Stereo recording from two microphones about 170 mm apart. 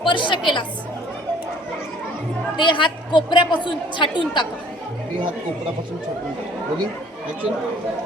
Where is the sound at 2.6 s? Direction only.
30° left (ahead or behind).